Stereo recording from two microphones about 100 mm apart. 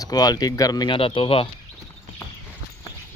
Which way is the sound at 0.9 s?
60° left (ahead or behind).